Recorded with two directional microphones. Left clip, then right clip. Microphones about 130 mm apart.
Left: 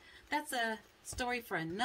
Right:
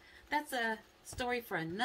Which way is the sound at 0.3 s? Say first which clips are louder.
Right 1 dB; 30° left (ahead or behind).